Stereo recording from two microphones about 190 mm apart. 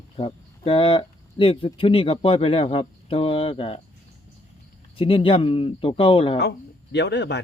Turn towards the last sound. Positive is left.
turn(degrees=65)  # may be behind; listen again after turning